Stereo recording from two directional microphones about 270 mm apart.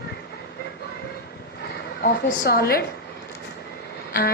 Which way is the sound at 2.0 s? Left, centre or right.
Left.